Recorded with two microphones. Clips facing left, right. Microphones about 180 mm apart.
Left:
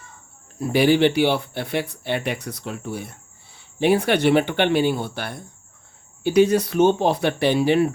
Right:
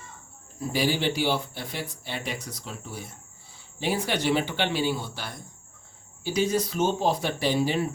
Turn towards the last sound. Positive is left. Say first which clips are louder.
# left 7 dB
turn(degrees=65)  # may be behind; listen again after turning